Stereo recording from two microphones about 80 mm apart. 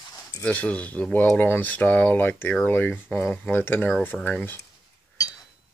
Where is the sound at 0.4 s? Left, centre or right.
Centre.